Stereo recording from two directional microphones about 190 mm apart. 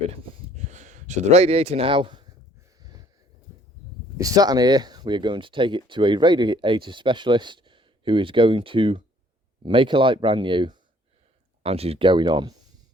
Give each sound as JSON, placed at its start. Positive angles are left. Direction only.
{"t": 0.6, "sound": "speech", "side_deg": -40}
{"t": 4.2, "sound": "speech", "side_deg": -20}